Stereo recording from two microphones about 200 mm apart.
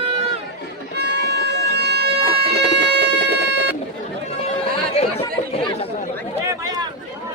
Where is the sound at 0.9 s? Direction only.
55° right (ahead or behind).